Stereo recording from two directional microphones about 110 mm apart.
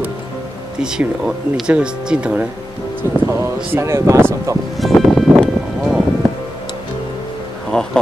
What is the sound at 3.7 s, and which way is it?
Speech, 25° right (ahead or behind).